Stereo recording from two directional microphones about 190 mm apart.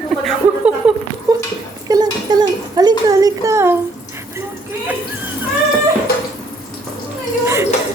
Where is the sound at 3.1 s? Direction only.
20° right (ahead or behind).